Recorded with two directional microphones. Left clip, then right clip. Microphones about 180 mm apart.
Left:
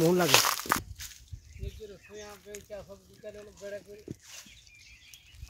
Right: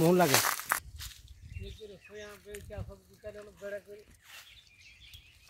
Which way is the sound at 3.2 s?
35° left (ahead or behind).